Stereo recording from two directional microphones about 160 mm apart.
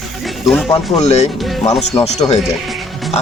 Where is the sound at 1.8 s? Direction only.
40° left (ahead or behind).